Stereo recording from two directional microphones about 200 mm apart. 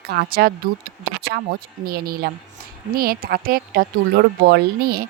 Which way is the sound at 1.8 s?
50° right (ahead or behind).